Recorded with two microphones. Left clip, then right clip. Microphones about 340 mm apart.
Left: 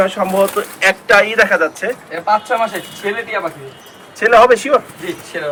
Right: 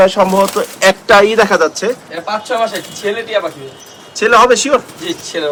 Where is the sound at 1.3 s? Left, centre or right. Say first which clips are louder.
Right 2 dB; centre.